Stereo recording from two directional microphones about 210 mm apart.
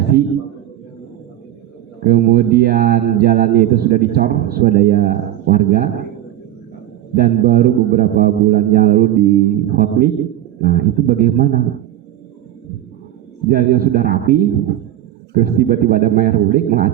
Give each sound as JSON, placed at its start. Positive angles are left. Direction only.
{"t": 0.1, "sound": "speech", "side_deg": -45}
{"t": 2.0, "sound": "speech", "side_deg": -45}
{"t": 7.1, "sound": "a man's voice", "side_deg": -45}
{"t": 13.5, "sound": "speech", "side_deg": -45}